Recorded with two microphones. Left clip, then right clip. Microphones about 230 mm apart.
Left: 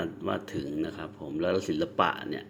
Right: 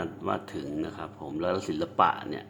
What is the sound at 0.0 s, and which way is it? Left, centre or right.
Speech, centre.